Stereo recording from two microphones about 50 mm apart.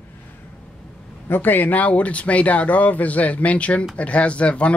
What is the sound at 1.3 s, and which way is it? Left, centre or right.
Speech, left.